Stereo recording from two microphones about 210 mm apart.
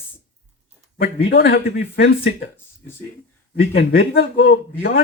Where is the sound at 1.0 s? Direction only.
50° left (ahead or behind).